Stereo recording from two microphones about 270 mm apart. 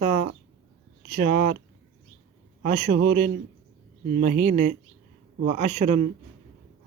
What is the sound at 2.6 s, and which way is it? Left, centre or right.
Speech, right.